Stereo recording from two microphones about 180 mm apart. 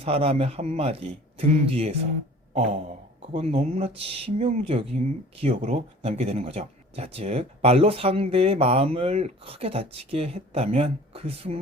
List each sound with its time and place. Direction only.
0.0 s speech: 35° right (ahead or behind)